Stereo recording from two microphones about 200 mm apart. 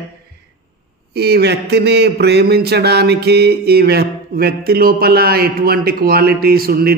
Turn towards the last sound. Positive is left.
turn(degrees=-50)  # may be behind; listen again after turning